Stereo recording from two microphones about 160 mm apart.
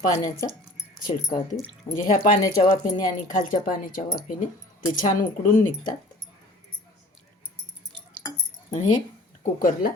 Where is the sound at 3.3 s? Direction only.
55° left (ahead or behind).